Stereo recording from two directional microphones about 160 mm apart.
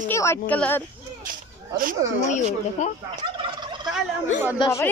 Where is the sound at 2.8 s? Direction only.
45° left (ahead or behind).